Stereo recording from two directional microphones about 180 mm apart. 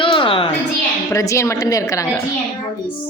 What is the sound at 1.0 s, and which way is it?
A woman's voice, 15° left (ahead or behind).